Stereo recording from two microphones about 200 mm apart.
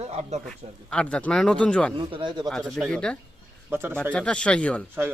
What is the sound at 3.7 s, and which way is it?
Speech, 10° right (ahead or behind).